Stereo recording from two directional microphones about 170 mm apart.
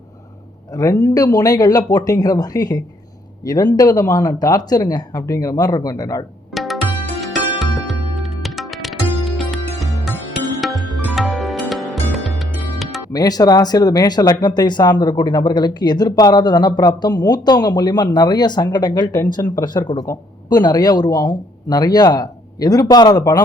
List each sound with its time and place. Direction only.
0.7 s speech: 20° left (ahead or behind)
6.5 s music: centre (ahead or behind)
13.1 s speech: 20° left (ahead or behind)